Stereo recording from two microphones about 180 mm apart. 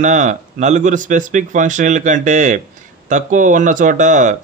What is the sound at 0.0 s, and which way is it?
A man's voice, 45° right (ahead or behind).